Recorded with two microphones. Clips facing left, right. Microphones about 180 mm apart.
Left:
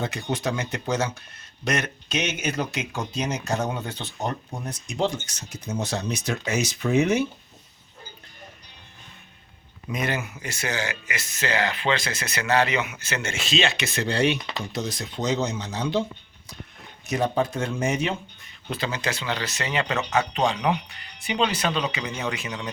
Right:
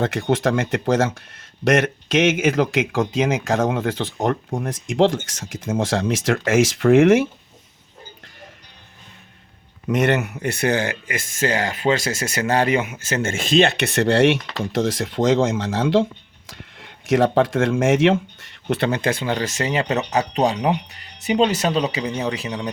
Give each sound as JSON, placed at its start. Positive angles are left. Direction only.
{"t": 0.0, "sound": "speech", "side_deg": -90}
{"t": 9.9, "sound": "speech", "side_deg": -75}
{"t": 19.8, "sound": "speech", "side_deg": -25}
{"t": 20.1, "sound": "speech", "side_deg": -40}